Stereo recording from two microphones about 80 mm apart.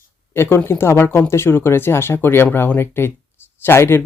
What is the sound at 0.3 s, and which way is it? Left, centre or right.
Speech, left.